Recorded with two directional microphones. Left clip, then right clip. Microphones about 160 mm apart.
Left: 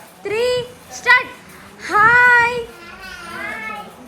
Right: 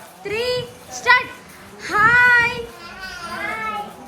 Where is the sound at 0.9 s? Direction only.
20° right (ahead or behind).